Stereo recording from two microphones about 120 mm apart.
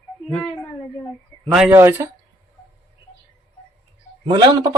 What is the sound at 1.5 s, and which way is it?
Speech, 5° right (ahead or behind).